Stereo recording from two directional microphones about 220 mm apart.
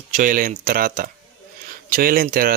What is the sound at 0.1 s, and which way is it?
Speech, 35° right (ahead or behind).